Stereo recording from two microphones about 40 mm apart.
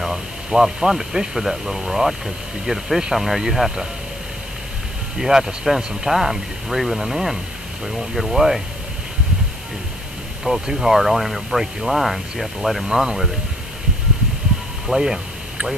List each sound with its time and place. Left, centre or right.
0.0 s speech: centre
5.1 s speech: centre
10.4 s speech: centre
14.9 s speech: centre